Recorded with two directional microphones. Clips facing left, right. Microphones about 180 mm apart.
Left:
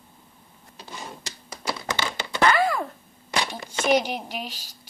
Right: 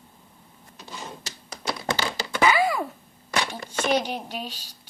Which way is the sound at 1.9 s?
35° right (ahead or behind).